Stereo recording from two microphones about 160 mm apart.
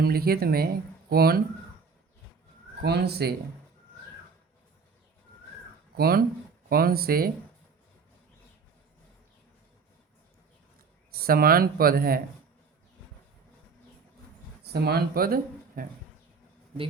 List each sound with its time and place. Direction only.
0.0 s speech: 70° right (ahead or behind)
2.8 s speech: 90° right
6.0 s speech: 70° right (ahead or behind)
11.2 s speech: 70° right (ahead or behind)
14.7 s speech: 90° right; by 15.9 s 65° right (ahead or behind)